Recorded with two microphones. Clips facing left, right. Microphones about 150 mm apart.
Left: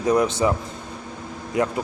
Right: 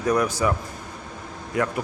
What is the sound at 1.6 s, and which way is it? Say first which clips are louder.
Speech: left 2 dB; 20° left (ahead or behind).